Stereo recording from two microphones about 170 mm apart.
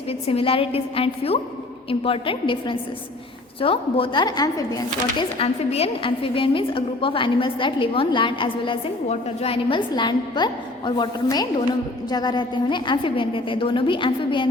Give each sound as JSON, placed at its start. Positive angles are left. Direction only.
{"t": 0.1, "sound": "a woman's voice", "side_deg": 35}
{"t": 5.4, "sound": "a woman's voice", "side_deg": 35}